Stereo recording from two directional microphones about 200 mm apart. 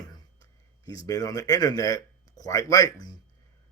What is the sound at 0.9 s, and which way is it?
Speech, 15° left (ahead or behind).